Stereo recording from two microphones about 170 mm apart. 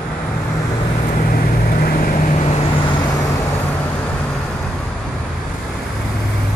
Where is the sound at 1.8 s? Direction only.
55° left (ahead or behind).